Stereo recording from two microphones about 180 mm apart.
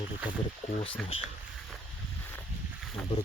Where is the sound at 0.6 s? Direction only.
35° left (ahead or behind).